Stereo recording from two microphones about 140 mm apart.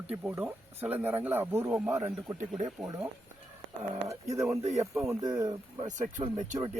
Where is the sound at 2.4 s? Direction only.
65° right (ahead or behind).